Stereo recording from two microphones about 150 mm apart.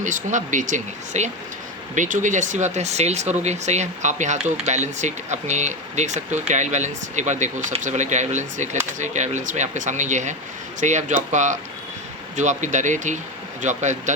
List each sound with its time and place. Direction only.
0.0 s speech: 55° right (ahead or behind)